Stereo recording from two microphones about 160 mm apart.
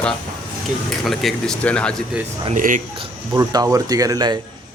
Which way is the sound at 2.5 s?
55° right (ahead or behind).